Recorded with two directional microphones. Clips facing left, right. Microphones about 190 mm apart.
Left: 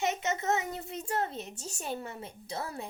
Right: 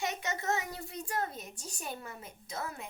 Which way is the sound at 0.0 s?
20° left (ahead or behind).